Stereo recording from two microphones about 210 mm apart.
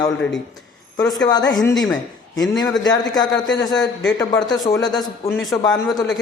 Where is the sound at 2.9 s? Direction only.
20° left (ahead or behind).